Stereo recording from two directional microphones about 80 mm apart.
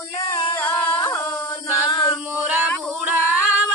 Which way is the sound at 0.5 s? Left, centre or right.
Left.